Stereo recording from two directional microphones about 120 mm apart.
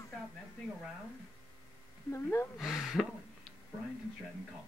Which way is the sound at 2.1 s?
20° left (ahead or behind).